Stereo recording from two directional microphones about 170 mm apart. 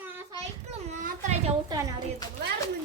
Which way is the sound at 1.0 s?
40° right (ahead or behind).